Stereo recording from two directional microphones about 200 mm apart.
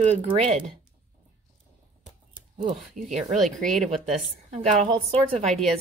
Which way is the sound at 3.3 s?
Centre (ahead or behind).